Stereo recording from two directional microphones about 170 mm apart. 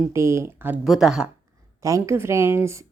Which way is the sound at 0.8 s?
Centre (ahead or behind).